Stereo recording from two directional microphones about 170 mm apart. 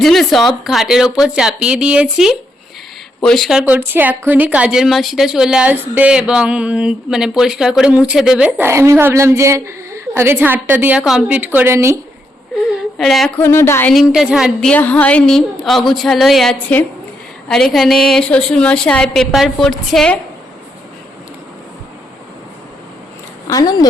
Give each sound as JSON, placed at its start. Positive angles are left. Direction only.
{"t": 0.0, "sound": "speech", "side_deg": 0}
{"t": 13.0, "sound": "speech", "side_deg": 0}
{"t": 13.4, "sound": "a woman's voice", "side_deg": 15}
{"t": 13.9, "sound": "speech", "side_deg": -5}
{"t": 23.5, "sound": "speech", "side_deg": 20}